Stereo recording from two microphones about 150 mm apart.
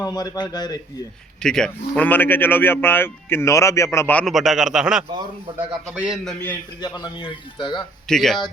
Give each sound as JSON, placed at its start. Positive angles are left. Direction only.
{"t": 0.0, "sound": "a man's voice", "side_deg": 25}
{"t": 1.4, "sound": "a man's voice", "side_deg": 5}
{"t": 4.3, "sound": "a man's voice", "side_deg": 0}
{"t": 6.2, "sound": "a man's voice", "side_deg": 10}
{"t": 6.8, "sound": "speech", "side_deg": 30}
{"t": 8.0, "sound": "speech", "side_deg": 5}